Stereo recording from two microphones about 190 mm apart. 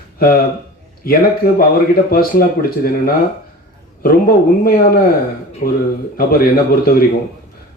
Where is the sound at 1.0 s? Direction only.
50° left (ahead or behind).